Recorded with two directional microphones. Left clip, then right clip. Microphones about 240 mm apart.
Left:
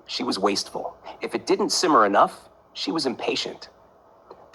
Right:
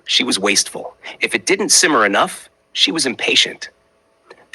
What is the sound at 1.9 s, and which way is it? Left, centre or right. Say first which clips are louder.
Speech: left 2 dB; right.